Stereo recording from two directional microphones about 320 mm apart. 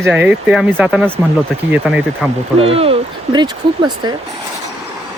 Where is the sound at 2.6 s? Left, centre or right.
Centre.